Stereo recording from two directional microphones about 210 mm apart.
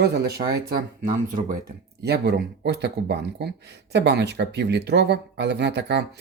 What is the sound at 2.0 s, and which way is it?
Speech, 50° right (ahead or behind).